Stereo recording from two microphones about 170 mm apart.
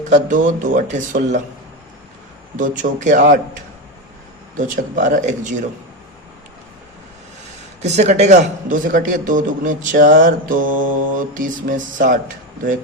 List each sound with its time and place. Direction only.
0.1 s a man's voice: 50° right (ahead or behind)
2.6 s a man's voice: 50° right (ahead or behind)
7.8 s a man's voice: 40° right (ahead or behind)